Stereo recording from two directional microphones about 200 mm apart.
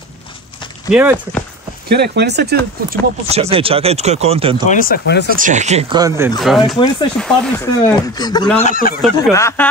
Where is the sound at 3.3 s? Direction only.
30° right (ahead or behind).